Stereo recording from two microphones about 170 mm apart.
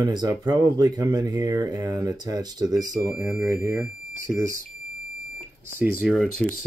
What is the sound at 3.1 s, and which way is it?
Speech, 10° right (ahead or behind).